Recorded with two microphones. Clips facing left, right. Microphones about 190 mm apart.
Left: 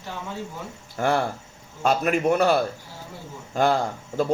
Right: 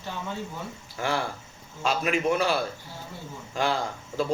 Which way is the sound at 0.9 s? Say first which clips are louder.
Left 6 dB; 45° left (ahead or behind).